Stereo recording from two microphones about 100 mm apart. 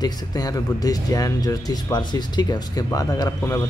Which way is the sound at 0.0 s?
40° left (ahead or behind).